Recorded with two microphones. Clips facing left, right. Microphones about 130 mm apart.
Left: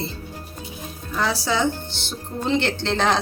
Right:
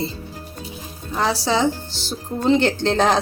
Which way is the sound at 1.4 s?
35° right (ahead or behind).